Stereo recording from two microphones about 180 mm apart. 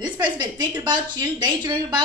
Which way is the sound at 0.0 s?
25° right (ahead or behind).